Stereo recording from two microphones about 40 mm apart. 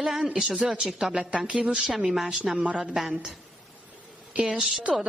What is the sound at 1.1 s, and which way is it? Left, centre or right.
Speech, right.